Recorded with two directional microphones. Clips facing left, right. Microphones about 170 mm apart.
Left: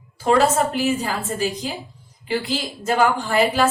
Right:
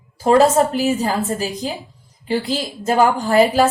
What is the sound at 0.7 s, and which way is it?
Speech, 40° right (ahead or behind).